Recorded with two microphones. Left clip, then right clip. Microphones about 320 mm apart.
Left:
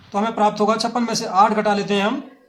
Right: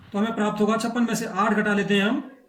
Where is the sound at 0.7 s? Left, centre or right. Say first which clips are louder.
Left 5 dB; centre.